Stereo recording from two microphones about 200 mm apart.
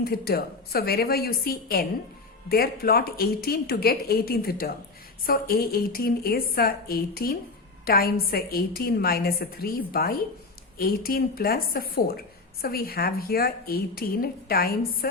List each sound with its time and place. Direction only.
0.0 s a woman's voice: 50° left (ahead or behind)